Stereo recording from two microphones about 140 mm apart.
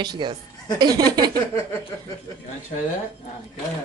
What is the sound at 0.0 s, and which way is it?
A woman's voice, 35° right (ahead or behind).